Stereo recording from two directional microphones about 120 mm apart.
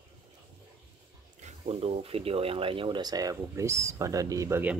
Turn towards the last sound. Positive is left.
turn(degrees=-20)  # may be behind; listen again after turning